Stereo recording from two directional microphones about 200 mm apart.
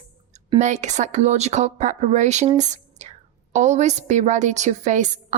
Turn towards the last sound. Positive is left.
turn(degrees=-35)  # may be behind; listen again after turning